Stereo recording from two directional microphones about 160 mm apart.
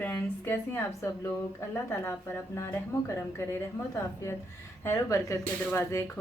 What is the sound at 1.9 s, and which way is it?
Speech, 15° left (ahead or behind).